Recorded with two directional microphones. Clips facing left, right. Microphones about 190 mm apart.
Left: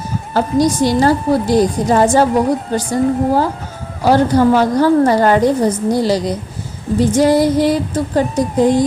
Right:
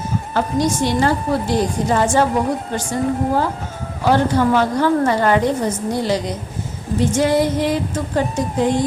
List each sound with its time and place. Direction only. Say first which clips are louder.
0.3 s a woman's voice: left 5 dB; 35° left (ahead or behind)